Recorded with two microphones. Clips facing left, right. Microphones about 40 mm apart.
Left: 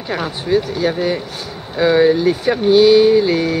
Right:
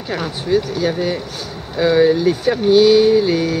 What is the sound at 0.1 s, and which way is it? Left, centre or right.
Speech, centre.